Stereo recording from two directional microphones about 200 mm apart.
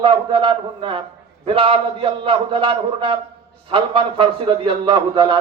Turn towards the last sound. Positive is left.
turn(degrees=-25)  # may be behind; listen again after turning